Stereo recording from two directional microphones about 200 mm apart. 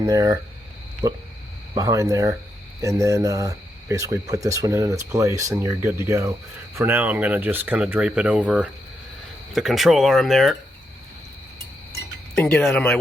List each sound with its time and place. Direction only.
0.0 s speech: 20° right (ahead or behind)
1.7 s speech: 15° right (ahead or behind); by 10.6 s centre (ahead or behind)
12.3 s speech: 5° left (ahead or behind)